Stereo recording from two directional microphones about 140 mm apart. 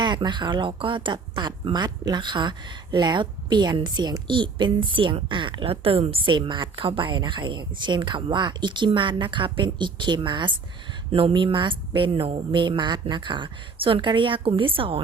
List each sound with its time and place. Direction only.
0.0 s speech: 30° right (ahead or behind)